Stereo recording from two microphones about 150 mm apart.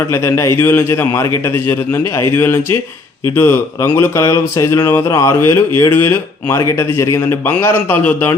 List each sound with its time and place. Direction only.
0.1 s speech: 20° left (ahead or behind)
2.3 s speech: 15° left (ahead or behind)